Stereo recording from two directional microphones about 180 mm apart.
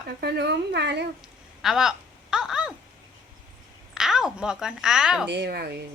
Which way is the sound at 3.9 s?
5° right (ahead or behind).